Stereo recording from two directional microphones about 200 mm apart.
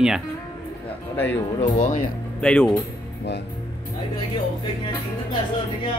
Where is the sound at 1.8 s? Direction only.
40° left (ahead or behind).